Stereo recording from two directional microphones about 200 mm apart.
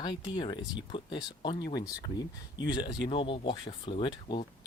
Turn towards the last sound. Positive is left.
turn(degrees=25)  # may be behind; listen again after turning